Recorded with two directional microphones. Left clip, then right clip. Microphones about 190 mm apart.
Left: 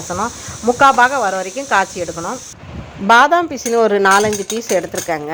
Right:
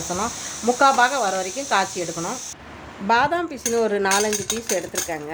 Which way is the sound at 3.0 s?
25° left (ahead or behind).